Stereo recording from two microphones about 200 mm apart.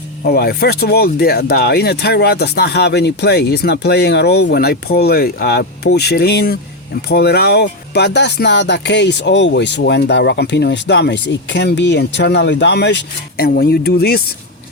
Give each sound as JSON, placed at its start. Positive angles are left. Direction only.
{"t": 0.3, "sound": "speech", "side_deg": 50}